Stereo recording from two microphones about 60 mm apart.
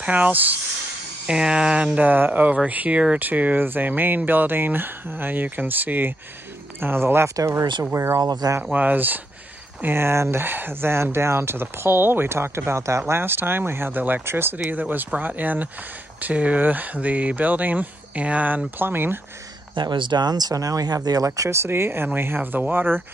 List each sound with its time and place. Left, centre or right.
0.0 s speech: right
1.2 s speech: centre
2.0 s speech: right
7.3 s speech: right
8.2 s speech: right
8.7 s speech: right
18.8 s speech: right
20.2 s speech: right
21.4 s speech: right